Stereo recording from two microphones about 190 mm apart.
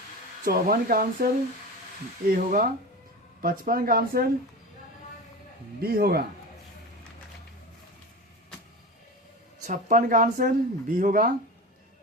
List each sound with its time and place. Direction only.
0.4 s speech: 50° right (ahead or behind)
2.3 s speech: 45° right (ahead or behind)
5.8 s speech: 55° right (ahead or behind)
9.6 s speech: 45° right (ahead or behind)